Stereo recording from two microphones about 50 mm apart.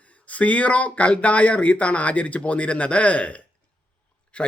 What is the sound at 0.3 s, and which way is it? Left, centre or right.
Speech, left.